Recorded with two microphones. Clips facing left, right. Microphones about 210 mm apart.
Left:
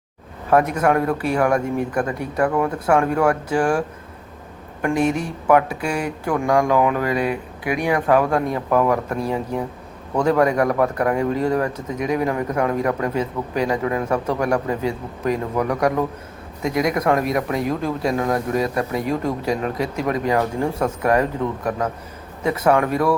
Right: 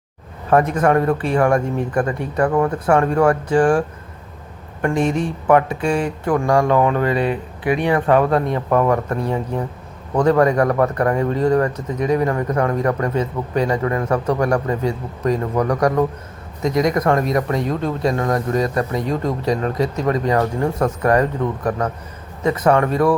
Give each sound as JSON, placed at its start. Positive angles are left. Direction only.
{"t": 0.5, "sound": "speech", "side_deg": 5}
{"t": 5.0, "sound": "speech", "side_deg": -25}
{"t": 5.5, "sound": "speech", "side_deg": 5}